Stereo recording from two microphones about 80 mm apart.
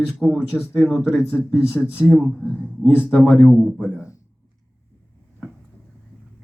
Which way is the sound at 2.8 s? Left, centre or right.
Left.